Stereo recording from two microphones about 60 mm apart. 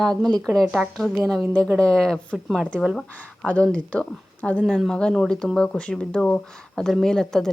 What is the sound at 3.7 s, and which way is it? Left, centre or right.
Speech, left.